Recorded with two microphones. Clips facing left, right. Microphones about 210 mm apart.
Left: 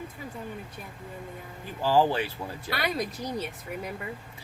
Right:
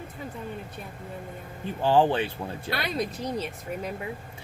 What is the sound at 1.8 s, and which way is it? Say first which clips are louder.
Speech: right 2 dB; 20° right (ahead or behind).